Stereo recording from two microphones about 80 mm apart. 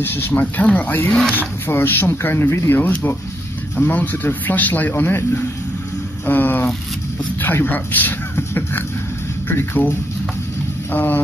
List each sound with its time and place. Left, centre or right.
0.0 s speech: left